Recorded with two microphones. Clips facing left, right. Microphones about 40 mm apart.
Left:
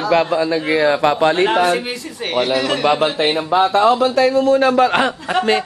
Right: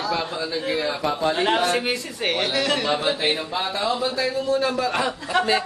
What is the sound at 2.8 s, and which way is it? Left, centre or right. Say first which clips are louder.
Speech: left 7 dB; left.